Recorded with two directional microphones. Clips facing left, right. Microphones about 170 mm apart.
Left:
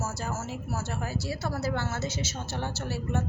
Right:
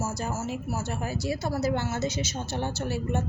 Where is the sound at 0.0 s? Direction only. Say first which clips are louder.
Right 3 dB; 15° right (ahead or behind).